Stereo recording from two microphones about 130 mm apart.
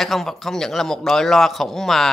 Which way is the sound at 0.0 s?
Centre (ahead or behind).